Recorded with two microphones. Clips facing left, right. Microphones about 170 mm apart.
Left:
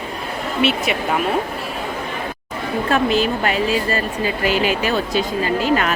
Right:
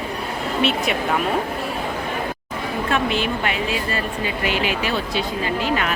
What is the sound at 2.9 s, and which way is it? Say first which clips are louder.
A woman's voice: left 5 dB; 35° left (ahead or behind).